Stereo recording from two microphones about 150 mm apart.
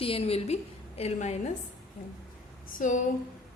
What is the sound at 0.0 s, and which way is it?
A woman's voice, 40° left (ahead or behind).